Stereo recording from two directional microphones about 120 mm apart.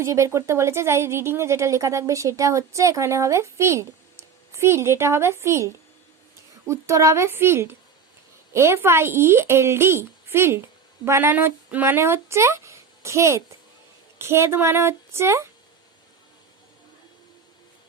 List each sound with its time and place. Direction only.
0.0 s speech: 25° right (ahead or behind)